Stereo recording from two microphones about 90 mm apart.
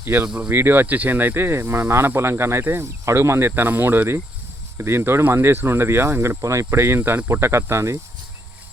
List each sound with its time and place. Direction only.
0.0 s speech: 25° right (ahead or behind)